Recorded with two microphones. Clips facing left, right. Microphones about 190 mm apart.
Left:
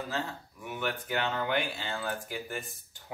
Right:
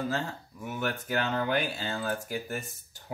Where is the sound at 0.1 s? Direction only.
40° right (ahead or behind).